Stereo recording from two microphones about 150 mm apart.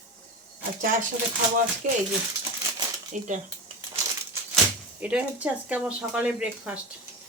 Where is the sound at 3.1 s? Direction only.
55° right (ahead or behind).